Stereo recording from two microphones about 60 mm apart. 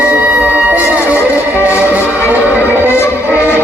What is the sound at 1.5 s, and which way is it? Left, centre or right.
Music, left.